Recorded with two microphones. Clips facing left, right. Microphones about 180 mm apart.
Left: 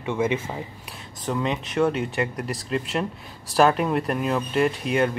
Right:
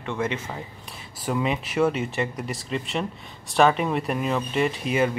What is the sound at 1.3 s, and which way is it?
Speech, 5° right (ahead or behind).